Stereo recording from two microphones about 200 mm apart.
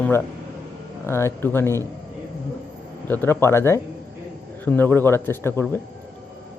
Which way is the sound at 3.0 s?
10° left (ahead or behind).